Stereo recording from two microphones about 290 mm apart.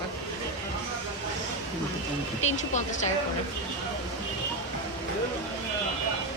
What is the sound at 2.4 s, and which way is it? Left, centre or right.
Speech, left.